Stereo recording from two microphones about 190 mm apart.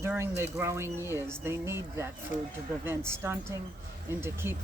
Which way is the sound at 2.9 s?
15° right (ahead or behind).